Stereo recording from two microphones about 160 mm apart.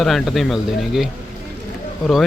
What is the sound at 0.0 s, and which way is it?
Speech, centre (ahead or behind).